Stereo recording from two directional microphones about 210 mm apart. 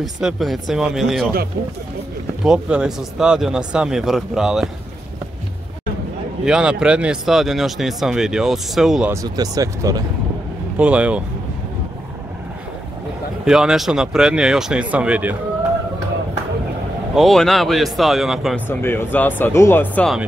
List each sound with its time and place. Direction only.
0.0 s speech: centre (ahead or behind)
2.4 s speech: 5° right (ahead or behind)
6.4 s speech: 5° right (ahead or behind)
9.1 s speech: 15° right (ahead or behind)
10.8 s speech: 5° right (ahead or behind)
13.5 s speech: centre (ahead or behind)
17.1 s speech: centre (ahead or behind)
18.7 s speech: 10° left (ahead or behind)